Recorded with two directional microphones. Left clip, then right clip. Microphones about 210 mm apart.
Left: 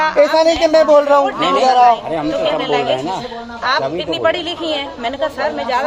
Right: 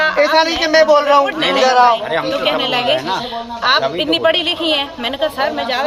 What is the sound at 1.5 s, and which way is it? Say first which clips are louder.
Speech: even; 55° left (ahead or behind).